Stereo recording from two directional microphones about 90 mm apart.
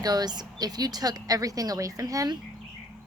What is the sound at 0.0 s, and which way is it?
A woman's voice, 50° right (ahead or behind).